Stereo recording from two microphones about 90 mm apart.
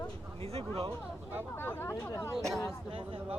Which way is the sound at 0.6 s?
90° right.